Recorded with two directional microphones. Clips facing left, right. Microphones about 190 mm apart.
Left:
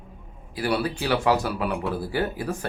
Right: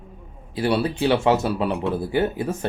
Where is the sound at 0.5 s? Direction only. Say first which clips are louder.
Right 4 dB; 25° right (ahead or behind).